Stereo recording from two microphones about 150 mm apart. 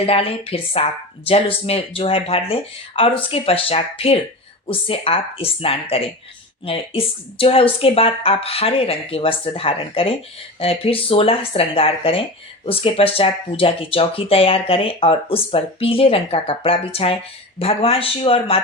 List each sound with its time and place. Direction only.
0.0 s speech: 40° left (ahead or behind)